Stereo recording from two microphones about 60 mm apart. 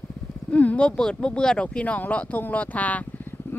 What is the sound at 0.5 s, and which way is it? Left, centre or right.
Speech, left.